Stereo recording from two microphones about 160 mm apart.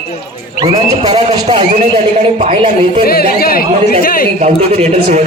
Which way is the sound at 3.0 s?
70° left (ahead or behind).